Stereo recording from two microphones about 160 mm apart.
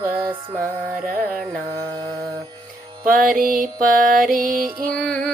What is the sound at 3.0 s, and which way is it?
Mantra, 60° right (ahead or behind).